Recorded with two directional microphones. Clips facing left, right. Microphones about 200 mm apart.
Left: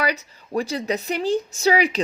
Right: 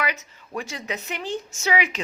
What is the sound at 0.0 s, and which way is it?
A woman's voice, 35° left (ahead or behind).